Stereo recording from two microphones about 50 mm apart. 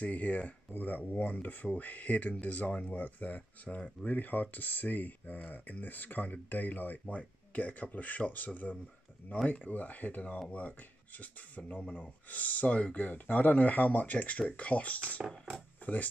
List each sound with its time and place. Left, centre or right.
0.0 s speech: left